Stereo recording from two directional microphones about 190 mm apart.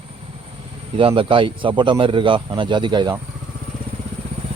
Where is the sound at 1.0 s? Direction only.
25° right (ahead or behind).